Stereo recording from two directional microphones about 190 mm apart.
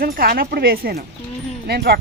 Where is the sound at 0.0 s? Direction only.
50° right (ahead or behind).